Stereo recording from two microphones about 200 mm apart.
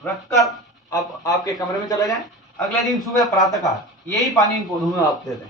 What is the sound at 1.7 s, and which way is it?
Speech, 20° left (ahead or behind).